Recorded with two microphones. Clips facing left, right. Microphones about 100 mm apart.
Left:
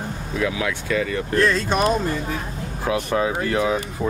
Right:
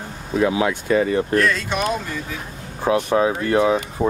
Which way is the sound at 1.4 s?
30° left (ahead or behind).